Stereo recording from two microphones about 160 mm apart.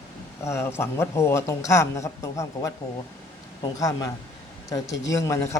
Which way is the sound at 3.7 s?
20° left (ahead or behind).